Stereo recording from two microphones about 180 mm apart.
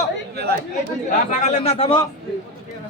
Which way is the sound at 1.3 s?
40° left (ahead or behind).